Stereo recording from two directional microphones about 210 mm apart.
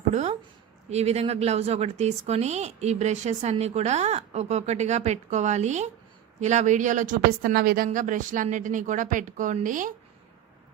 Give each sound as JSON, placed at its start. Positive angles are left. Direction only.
{"t": 0.1, "sound": "a woman's voice", "side_deg": -35}